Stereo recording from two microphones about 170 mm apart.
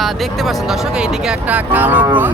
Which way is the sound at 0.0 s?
Centre (ahead or behind).